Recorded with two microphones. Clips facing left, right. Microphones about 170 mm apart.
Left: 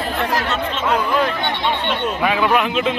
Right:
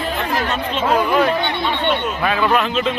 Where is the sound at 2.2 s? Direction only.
15° left (ahead or behind).